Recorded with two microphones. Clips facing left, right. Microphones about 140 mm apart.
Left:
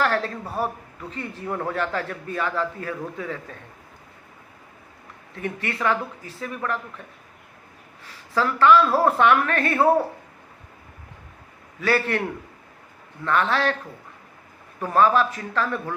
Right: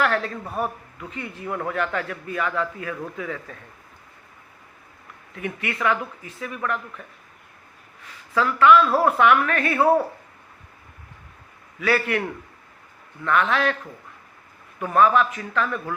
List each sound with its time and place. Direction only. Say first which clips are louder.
0.0 s a man's voice: even; 35° left (ahead or behind)
5.3 s a man's voice: even; 35° left (ahead or behind)
8.0 s a man's voice: right 1 dB; 35° left (ahead or behind)
11.8 s a man's voice: even; 35° left (ahead or behind)
13.2 s a man's voice: right 1 dB; 35° left (ahead or behind)
14.8 s a man's voice: right 1 dB; 30° left (ahead or behind)